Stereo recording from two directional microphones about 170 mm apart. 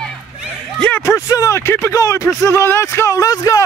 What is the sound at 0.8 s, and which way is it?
Speech, 15° left (ahead or behind).